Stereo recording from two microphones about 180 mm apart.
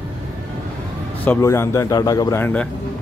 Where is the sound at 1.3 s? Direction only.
15° left (ahead or behind).